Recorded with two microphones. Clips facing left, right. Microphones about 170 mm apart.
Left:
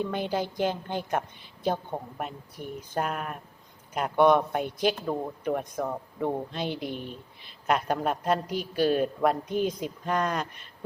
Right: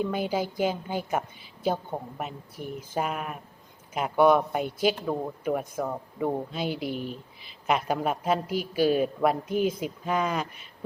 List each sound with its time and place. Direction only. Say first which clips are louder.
0.0 s a woman's voice: right 1 dB; 5° right (ahead or behind)